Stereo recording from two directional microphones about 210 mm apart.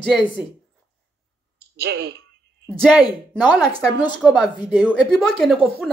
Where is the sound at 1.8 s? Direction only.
50° right (ahead or behind).